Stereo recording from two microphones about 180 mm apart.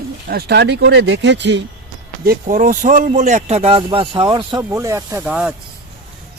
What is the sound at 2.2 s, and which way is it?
Speech, 50° right (ahead or behind).